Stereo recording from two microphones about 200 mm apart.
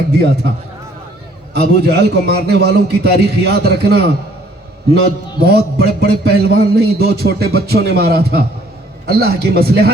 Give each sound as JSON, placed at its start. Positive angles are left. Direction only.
{"t": 1.5, "sound": "a man's voice", "side_deg": -55}
{"t": 5.4, "sound": "a man's voice", "side_deg": -55}